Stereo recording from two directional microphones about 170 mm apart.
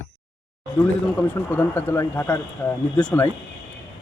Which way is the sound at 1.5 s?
10° left (ahead or behind).